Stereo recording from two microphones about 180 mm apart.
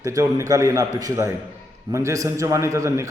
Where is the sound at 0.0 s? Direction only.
15° right (ahead or behind).